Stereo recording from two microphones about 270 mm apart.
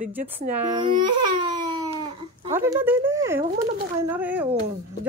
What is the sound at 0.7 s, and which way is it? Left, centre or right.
Baby cry, centre.